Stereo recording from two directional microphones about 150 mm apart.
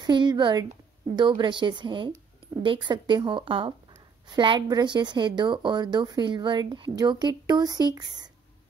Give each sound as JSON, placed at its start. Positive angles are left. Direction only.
{"t": 0.0, "sound": "a woman's voice", "side_deg": -30}